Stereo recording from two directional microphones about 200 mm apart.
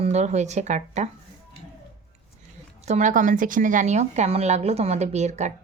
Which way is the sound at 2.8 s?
35° right (ahead or behind).